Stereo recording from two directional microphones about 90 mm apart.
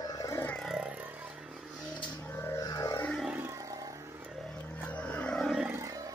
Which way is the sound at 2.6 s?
45° left (ahead or behind).